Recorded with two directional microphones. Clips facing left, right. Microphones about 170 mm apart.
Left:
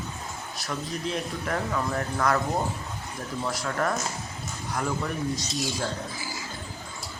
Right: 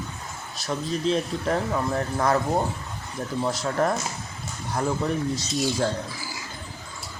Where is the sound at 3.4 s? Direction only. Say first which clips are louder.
Right 4 dB; 25° right (ahead or behind).